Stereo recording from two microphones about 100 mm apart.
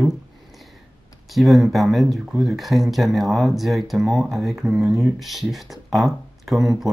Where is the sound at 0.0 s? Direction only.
Centre (ahead or behind).